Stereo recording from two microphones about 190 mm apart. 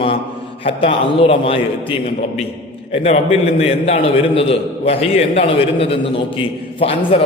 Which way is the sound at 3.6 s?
30° left (ahead or behind).